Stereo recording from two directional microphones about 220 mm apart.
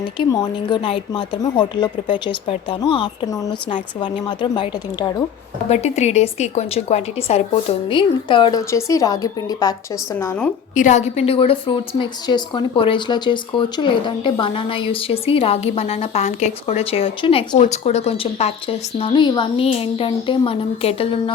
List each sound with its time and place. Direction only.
0.2 s a woman's voice: 20° left (ahead or behind)
10.8 s a woman's voice: 35° left (ahead or behind)